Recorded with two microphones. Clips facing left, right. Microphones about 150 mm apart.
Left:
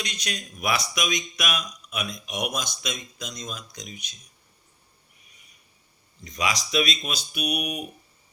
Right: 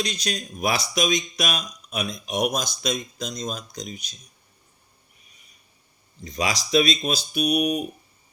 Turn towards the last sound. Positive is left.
turn(degrees=-35)  # may be behind; listen again after turning